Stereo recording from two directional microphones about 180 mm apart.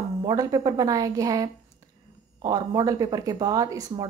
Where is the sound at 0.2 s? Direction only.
20° right (ahead or behind).